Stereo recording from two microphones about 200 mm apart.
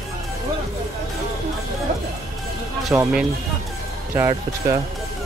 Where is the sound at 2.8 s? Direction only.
5° right (ahead or behind).